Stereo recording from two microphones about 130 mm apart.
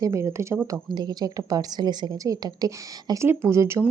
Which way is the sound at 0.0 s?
25° right (ahead or behind).